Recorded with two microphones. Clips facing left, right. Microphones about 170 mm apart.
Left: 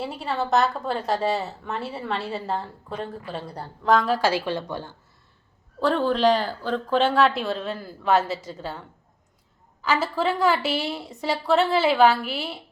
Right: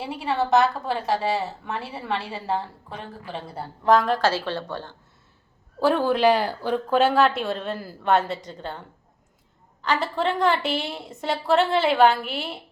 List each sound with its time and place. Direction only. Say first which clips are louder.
0.0 s a woman's voice: right 2 dB; centre (ahead or behind)
5.8 s a woman's voice: right 1 dB; 10° right (ahead or behind)
9.8 s a woman's voice: even; 5° left (ahead or behind)